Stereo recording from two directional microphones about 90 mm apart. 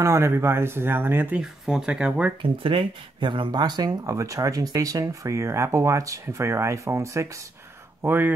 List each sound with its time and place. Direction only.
0.0 s speech: 30° right (ahead or behind)
1.3 s speech: 5° right (ahead or behind)
2.6 s speech: 85° right; by 8.4 s 25° right (ahead or behind)